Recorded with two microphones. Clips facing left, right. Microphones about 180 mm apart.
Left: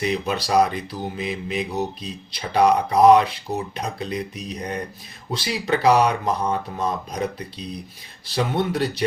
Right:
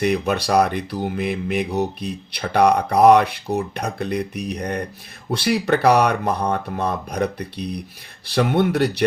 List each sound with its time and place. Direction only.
0.0 s speech: 60° right (ahead or behind)